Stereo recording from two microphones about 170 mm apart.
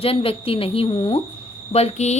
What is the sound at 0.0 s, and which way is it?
Speech, 35° left (ahead or behind).